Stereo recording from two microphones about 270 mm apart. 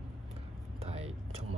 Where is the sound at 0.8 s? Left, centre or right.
Right.